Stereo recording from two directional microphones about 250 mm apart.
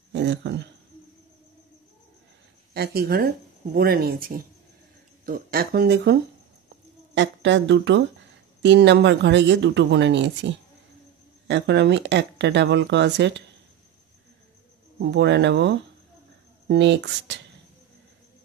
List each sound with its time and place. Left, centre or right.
0.1 s speech: right
2.7 s speech: right
7.2 s speech: right
15.0 s speech: right